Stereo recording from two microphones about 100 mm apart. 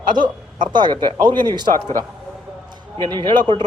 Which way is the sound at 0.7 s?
50° right (ahead or behind).